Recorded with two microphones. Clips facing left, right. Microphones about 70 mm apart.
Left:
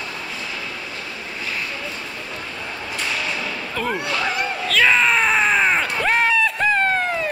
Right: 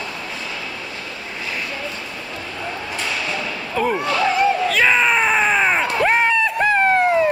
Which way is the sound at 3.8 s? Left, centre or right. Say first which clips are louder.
Right 5 dB; right.